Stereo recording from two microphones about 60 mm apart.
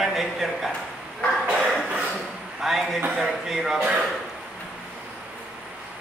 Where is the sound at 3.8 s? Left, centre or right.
Right.